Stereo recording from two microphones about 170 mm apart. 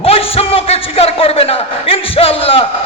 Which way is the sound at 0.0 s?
35° left (ahead or behind).